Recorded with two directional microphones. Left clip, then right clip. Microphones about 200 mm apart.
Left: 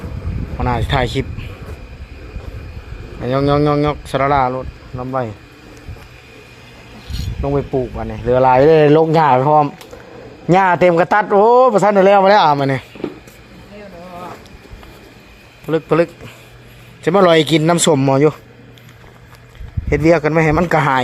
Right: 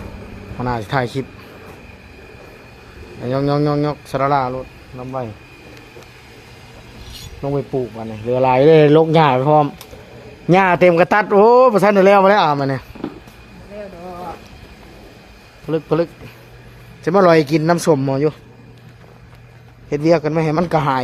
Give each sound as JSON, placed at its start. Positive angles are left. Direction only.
{"t": 0.6, "sound": "speech", "side_deg": 0}
{"t": 3.2, "sound": "speech", "side_deg": 0}
{"t": 4.9, "sound": "speech", "side_deg": 20}
{"t": 7.4, "sound": "speech", "side_deg": 10}
{"t": 8.8, "sound": "speech", "side_deg": -15}
{"t": 15.6, "sound": "speech", "side_deg": 10}
{"t": 17.1, "sound": "speech", "side_deg": 5}
{"t": 19.9, "sound": "speech", "side_deg": 10}